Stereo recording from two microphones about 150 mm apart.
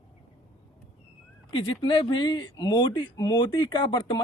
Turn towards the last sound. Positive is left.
turn(degrees=30)  # may be behind; listen again after turning